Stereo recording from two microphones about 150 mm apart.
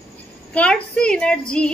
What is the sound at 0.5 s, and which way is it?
A woman's voice, 5° left (ahead or behind).